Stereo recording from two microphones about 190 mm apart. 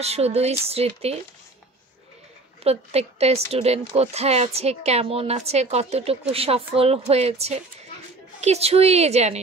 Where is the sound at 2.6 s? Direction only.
35° right (ahead or behind).